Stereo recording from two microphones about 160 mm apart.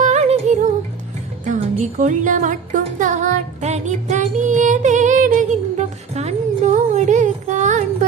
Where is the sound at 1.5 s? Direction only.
50° right (ahead or behind).